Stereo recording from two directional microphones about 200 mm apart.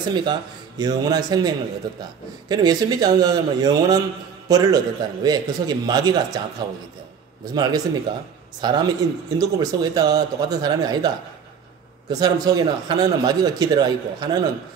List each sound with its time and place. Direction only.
0.1 s a man's voice: 20° right (ahead or behind)
7.4 s a man's voice: 20° right (ahead or behind)
12.1 s a man's voice: 20° right (ahead or behind)